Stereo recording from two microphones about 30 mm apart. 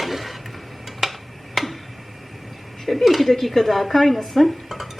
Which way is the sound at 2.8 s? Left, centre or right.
Centre.